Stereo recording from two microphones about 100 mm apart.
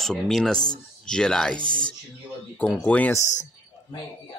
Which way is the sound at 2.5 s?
10° left (ahead or behind).